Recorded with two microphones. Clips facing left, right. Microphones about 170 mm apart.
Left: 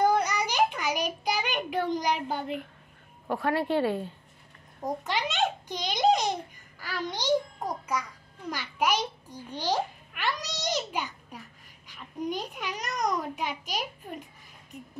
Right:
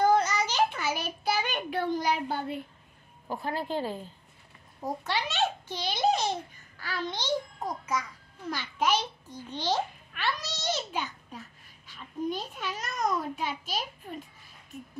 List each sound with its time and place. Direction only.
0.0 s a sound: 15° left (ahead or behind)
3.3 s a woman's voice: 70° left (ahead or behind)
5.0 s a child's voice: 15° left (ahead or behind)